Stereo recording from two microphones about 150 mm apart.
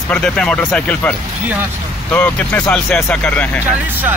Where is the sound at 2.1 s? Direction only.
10° left (ahead or behind).